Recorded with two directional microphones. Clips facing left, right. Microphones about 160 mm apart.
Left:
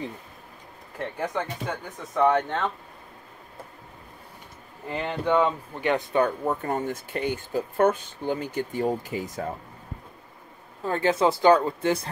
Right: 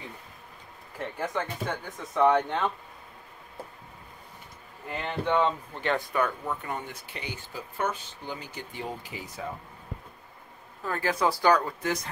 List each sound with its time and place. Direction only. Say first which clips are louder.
1.2 s speech: left 1 dB; 15° left (ahead or behind)
2.1 s speech: left 1 dB; 10° right (ahead or behind)
4.8 s speech: left 3 dB; 15° left (ahead or behind)
6.4 s speech: left 7 dB; 45° left (ahead or behind)
10.8 s speech: left 5 dB; 25° left (ahead or behind)